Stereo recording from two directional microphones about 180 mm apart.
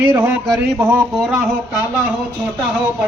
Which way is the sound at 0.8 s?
10° right (ahead or behind).